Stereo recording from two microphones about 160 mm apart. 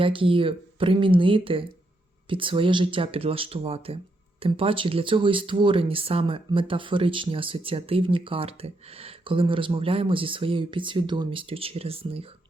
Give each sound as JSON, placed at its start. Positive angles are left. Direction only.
{"t": 0.0, "sound": "speech", "side_deg": -35}